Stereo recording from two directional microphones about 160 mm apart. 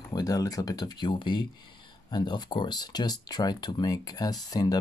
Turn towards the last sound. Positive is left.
turn(degrees=25)  # may be behind; listen again after turning